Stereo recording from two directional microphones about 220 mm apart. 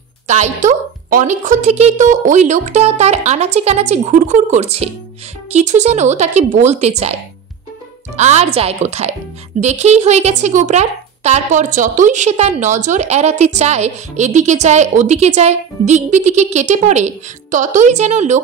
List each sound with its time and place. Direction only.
0.3 s a woman's voice: 30° right (ahead or behind)
8.2 s a woman's voice: 30° right (ahead or behind)